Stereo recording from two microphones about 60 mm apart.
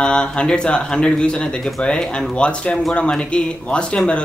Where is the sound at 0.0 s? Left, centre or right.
Centre.